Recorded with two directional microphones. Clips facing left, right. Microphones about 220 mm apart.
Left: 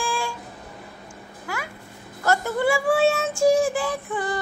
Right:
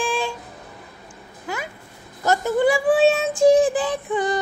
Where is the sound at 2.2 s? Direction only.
20° right (ahead or behind).